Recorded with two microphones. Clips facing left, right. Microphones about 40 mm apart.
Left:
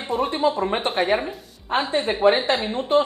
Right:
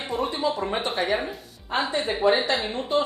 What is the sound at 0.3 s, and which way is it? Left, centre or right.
A man's voice, left.